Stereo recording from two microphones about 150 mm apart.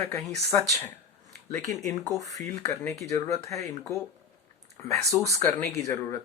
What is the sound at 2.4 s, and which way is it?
Speech, 20° left (ahead or behind).